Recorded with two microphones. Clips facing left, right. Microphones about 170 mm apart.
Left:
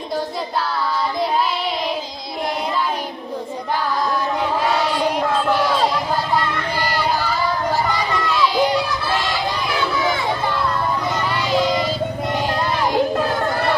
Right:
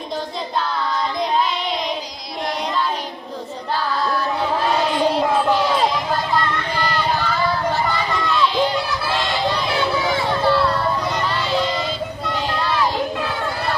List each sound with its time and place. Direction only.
5.3 s crowd: 10° right (ahead or behind)
8.2 s run: 10° left (ahead or behind)
11.5 s music: 15° left (ahead or behind)
13.1 s children playing: 45° left (ahead or behind)